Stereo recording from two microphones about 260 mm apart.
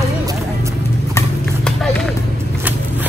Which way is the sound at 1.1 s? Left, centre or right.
Centre.